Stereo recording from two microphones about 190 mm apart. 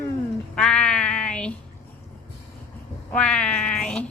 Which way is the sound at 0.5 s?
5° left (ahead or behind).